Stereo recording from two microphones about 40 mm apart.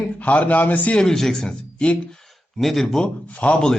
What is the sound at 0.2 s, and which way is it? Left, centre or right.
Speech, left.